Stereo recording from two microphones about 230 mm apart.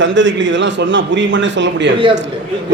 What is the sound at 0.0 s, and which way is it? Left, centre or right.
A man's voice, right.